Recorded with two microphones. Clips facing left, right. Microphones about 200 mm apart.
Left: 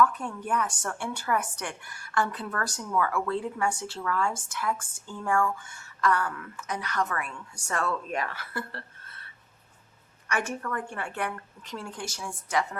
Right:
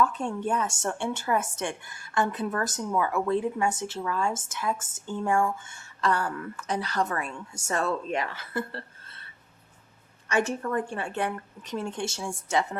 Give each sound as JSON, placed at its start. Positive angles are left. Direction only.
{"t": 0.0, "sound": "a woman's voice", "side_deg": -25}
{"t": 10.2, "sound": "a woman's voice", "side_deg": -25}